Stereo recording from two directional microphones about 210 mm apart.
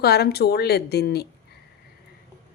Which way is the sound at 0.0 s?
50° left (ahead or behind).